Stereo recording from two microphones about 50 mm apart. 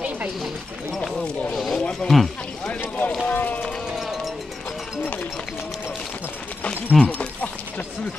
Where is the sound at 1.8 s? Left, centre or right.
Centre.